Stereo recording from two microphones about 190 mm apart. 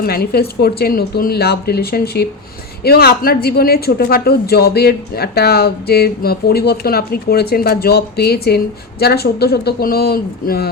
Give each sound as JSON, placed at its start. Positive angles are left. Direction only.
{"t": 0.0, "sound": "a woman's voice", "side_deg": 55}